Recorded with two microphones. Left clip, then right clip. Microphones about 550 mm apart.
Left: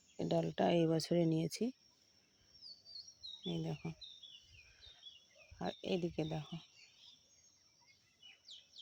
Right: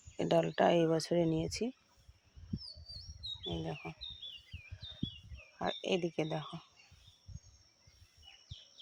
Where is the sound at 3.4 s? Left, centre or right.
Left.